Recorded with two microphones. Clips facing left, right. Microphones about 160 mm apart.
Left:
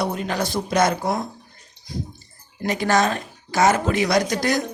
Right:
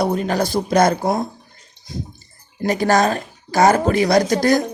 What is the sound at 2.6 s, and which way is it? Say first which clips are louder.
A woman's voice: right 4 dB; 40° right (ahead or behind).